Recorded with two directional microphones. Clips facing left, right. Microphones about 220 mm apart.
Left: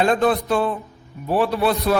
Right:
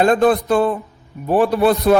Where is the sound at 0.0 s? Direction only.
50° right (ahead or behind).